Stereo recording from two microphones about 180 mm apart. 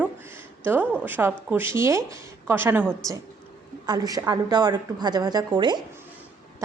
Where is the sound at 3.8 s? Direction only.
20° right (ahead or behind).